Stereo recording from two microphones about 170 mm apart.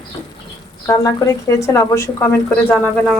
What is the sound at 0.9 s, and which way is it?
A woman's voice, 20° left (ahead or behind).